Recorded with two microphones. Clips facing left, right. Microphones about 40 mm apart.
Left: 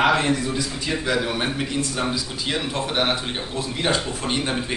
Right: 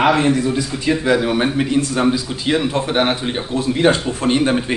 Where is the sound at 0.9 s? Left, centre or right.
Centre.